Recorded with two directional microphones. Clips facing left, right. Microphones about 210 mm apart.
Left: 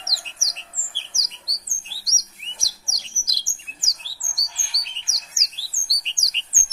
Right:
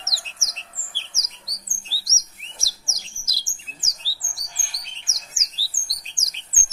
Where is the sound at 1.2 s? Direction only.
10° right (ahead or behind).